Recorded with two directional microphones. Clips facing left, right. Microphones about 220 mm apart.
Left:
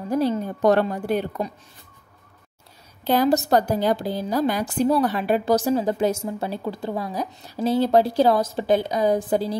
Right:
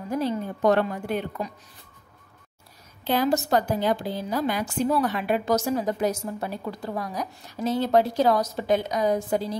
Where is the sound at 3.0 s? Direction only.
40° left (ahead or behind).